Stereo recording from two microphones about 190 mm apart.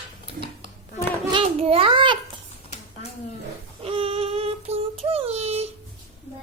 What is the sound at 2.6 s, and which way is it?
Dishes, 30° left (ahead or behind).